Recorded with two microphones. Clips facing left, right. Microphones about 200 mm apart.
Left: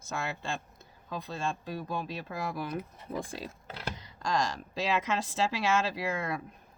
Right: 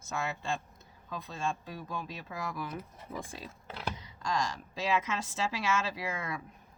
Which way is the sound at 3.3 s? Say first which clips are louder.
Left 3 dB; 85° left.